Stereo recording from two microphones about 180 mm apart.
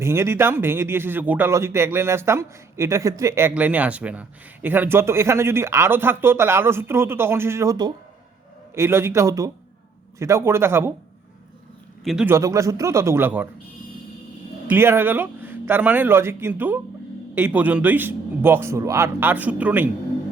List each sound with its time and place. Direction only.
0.0 s speech: 15° right (ahead or behind)
12.0 s a man's voice: 5° right (ahead or behind)
12.3 s speech: 15° right (ahead or behind)
14.7 s speech: 15° right (ahead or behind)